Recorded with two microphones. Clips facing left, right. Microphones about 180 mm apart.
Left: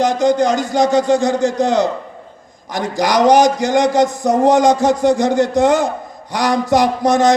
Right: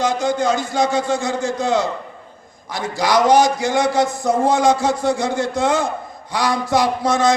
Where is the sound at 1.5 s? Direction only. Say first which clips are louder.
Left 1 dB; 20° left (ahead or behind).